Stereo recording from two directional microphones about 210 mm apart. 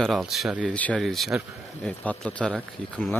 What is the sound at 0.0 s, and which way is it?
Speech, centre (ahead or behind).